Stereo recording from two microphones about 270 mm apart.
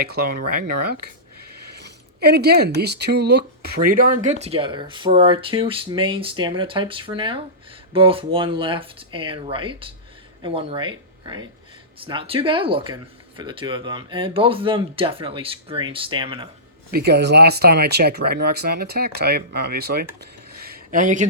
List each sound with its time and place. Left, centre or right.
0.0 s speech: right
1.8 s speech: right; by 16.5 s centre
16.9 s speech: right
20.6 s a sound: right